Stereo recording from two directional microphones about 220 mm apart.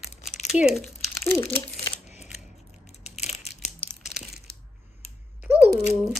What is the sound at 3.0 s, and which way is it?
Crushing, 30° left (ahead or behind).